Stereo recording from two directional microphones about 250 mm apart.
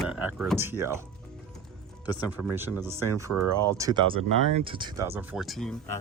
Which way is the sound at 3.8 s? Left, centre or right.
Centre.